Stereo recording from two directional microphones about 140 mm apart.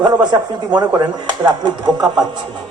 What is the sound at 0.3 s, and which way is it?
Speech, 30° right (ahead or behind).